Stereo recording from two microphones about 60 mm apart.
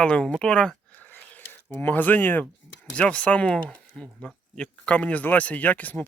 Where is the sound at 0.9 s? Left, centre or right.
Left.